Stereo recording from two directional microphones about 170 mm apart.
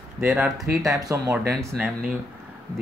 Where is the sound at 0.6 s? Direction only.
20° right (ahead or behind).